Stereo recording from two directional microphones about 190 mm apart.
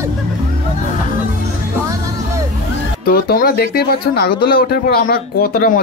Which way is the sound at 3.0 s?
50° left (ahead or behind).